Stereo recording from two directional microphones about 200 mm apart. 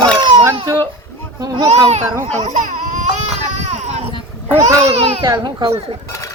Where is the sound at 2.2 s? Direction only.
35° right (ahead or behind).